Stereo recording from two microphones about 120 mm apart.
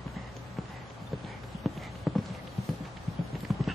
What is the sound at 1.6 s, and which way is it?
Clip-clop, centre (ahead or behind).